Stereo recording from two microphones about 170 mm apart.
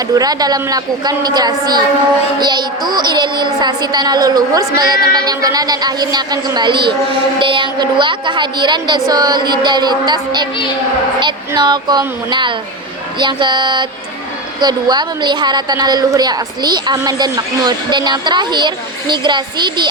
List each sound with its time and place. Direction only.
0.1 s a woman's voice: 20° right (ahead or behind)